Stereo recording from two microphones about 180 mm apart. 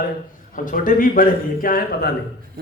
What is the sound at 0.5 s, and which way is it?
A man's voice, 50° left (ahead or behind).